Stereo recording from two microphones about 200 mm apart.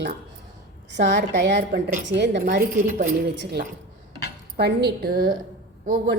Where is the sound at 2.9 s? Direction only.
40° right (ahead or behind).